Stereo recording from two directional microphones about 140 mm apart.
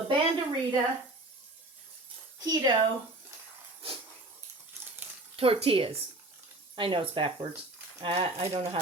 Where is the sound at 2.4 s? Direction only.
25° right (ahead or behind).